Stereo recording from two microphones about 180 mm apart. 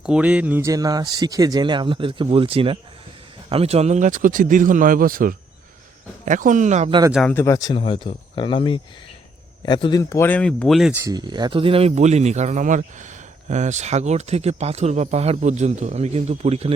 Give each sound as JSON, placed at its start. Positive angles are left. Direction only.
{"t": 0.0, "sound": "speech", "side_deg": -5}
{"t": 7.1, "sound": "speech", "side_deg": 0}
{"t": 7.3, "sound": "speech", "side_deg": 15}
{"t": 7.7, "sound": "speech", "side_deg": 30}
{"t": 11.0, "sound": "speech", "side_deg": -25}